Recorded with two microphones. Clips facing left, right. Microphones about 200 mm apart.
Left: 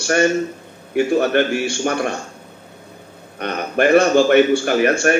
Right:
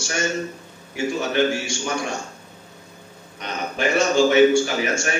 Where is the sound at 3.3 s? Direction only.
60° left (ahead or behind).